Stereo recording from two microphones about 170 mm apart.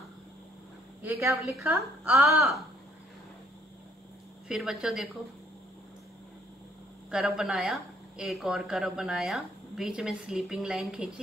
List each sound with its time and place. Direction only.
1.0 s a woman's voice: 15° right (ahead or behind); by 2.6 s centre (ahead or behind)
4.5 s speech: 5° right (ahead or behind)
7.1 s speech: 5° right (ahead or behind)